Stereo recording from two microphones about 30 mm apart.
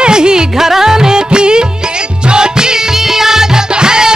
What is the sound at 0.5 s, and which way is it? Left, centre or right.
Music, centre.